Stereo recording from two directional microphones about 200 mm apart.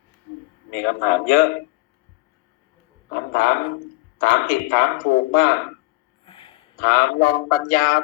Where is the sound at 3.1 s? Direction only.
50° left (ahead or behind).